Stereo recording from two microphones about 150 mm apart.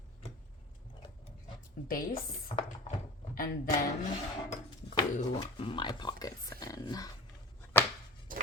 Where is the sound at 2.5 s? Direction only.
45° left (ahead or behind).